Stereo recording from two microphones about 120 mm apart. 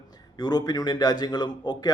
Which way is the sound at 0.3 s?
35° left (ahead or behind).